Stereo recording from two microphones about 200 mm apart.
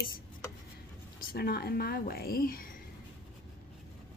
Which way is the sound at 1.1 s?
50° left (ahead or behind).